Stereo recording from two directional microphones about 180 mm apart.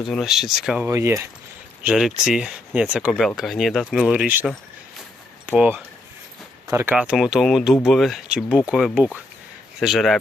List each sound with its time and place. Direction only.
0.1 s speech: centre (ahead or behind)
0.9 s speech: 15° right (ahead or behind)
1.8 s speech: 5° right (ahead or behind)
5.5 s speech: 10° right (ahead or behind)